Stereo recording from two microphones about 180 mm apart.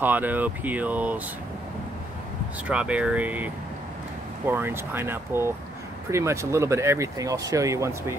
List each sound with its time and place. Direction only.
0.0 s speech: 10° right (ahead or behind)
2.7 s speech: 5° right (ahead or behind)